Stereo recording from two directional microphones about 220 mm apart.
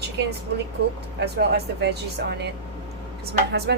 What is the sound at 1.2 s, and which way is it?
Speech, 50° right (ahead or behind).